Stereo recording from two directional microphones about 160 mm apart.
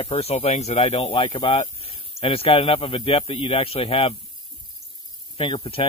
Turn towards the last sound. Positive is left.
turn(degrees=35)  # may be behind; listen again after turning